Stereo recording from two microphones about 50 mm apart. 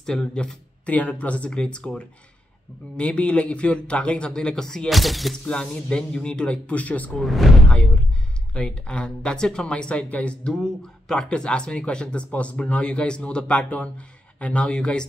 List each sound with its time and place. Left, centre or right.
0.0 s speech: centre
0.8 s speech: left
3.0 s speech: left
4.8 s speech: centre
5.4 s speech: centre
7.2 s speech: centre
7.7 s speech: left
11.1 s speech: centre